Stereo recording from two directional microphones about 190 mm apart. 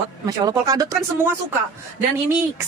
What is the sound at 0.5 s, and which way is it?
Speech, 20° right (ahead or behind).